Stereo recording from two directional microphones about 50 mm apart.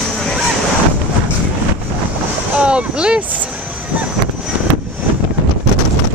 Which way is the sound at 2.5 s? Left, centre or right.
Right.